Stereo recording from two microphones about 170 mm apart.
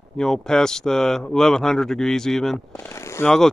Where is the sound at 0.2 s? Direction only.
5° left (ahead or behind).